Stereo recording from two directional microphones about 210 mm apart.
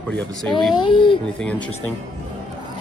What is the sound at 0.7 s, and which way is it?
Speech, 20° left (ahead or behind).